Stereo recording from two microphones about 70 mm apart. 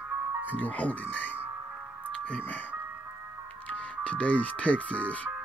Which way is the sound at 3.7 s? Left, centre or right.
Centre.